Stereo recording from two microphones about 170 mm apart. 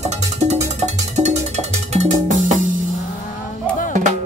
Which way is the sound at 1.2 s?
40° right (ahead or behind).